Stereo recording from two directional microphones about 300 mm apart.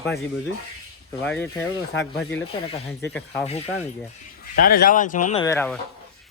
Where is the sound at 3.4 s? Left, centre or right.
Left.